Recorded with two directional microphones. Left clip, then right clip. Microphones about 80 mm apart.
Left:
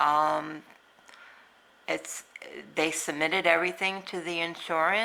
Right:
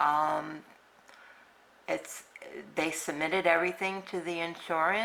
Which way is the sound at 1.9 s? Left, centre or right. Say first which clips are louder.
Left 2 dB; left.